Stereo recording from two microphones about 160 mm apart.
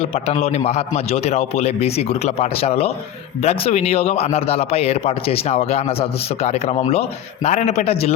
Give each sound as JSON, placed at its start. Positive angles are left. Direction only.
{"t": 0.0, "sound": "a man's voice", "side_deg": 40}